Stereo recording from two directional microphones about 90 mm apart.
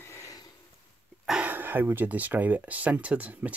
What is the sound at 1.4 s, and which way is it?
Speech, 20° right (ahead or behind).